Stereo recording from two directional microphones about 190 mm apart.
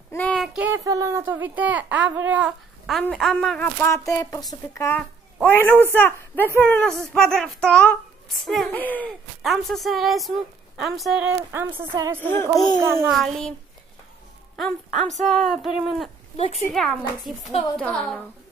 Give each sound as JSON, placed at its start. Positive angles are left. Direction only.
{"t": 0.1, "sound": "a sound", "side_deg": 5}
{"t": 0.5, "sound": "a woman's voice", "side_deg": -10}
{"t": 12.2, "sound": "a woman's voice", "side_deg": 10}
{"t": 12.8, "sound": "speech", "side_deg": -15}
{"t": 13.2, "sound": "speech", "side_deg": 0}
{"t": 15.2, "sound": "speech", "side_deg": 0}
{"t": 16.3, "sound": "speech", "side_deg": 35}
{"t": 16.7, "sound": "speech", "side_deg": 0}